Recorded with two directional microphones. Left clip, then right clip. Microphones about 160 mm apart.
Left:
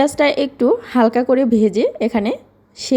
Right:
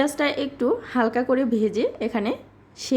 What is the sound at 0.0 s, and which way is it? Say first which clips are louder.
A woman's voice: left 8 dB; 30° left (ahead or behind).